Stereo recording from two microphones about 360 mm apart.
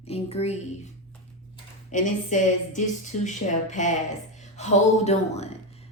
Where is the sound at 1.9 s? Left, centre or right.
Left.